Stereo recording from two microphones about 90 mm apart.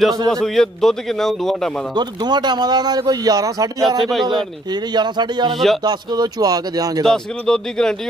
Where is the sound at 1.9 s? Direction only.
55° right (ahead or behind).